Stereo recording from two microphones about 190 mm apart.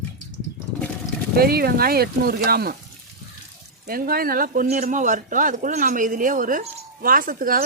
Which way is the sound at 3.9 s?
50° right (ahead or behind).